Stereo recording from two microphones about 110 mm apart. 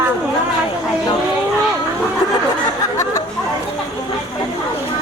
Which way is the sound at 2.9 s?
25° left (ahead or behind).